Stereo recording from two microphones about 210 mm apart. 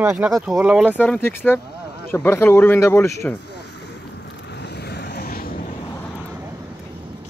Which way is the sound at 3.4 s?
55° left (ahead or behind).